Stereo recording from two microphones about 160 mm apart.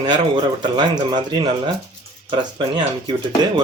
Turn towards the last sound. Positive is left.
turn(degrees=-25)  # may be behind; listen again after turning